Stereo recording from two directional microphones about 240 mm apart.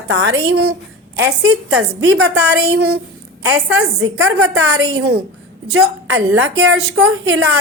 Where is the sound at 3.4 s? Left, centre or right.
Right.